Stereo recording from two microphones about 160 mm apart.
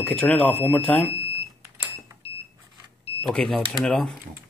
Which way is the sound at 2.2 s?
40° left (ahead or behind).